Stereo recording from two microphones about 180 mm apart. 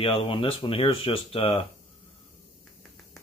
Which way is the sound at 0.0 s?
30° left (ahead or behind).